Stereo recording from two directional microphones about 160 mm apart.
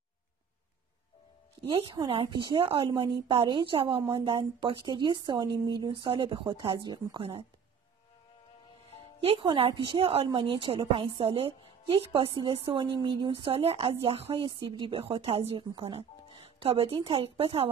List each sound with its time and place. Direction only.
1.7 s a woman's voice: 35° right (ahead or behind)
4.3 s a woman's voice: 30° right (ahead or behind)
9.2 s a woman's voice: 35° right (ahead or behind)